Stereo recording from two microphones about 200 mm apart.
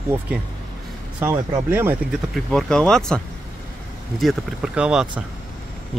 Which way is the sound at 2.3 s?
5° left (ahead or behind).